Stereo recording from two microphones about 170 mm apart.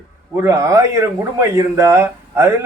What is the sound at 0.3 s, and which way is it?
Speech, 15° right (ahead or behind).